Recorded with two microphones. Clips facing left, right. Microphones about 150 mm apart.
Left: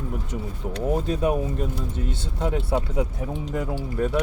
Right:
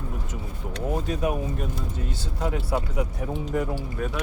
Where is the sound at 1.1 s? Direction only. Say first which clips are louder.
Left 3 dB; 30° left (ahead or behind).